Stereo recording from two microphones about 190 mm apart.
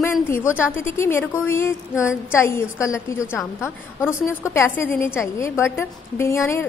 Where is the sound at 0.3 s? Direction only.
15° left (ahead or behind).